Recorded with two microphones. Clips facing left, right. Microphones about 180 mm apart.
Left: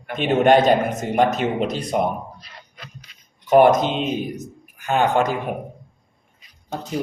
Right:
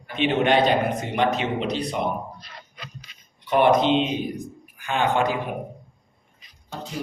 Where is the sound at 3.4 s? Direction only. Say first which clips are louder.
Left 4 dB; 45° left (ahead or behind).